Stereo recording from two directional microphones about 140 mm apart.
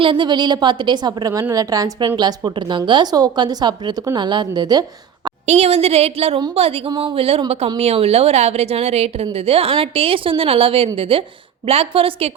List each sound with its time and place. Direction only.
0.0 s a woman's voice: 35° right (ahead or behind)
5.5 s a woman's voice: 50° right (ahead or behind)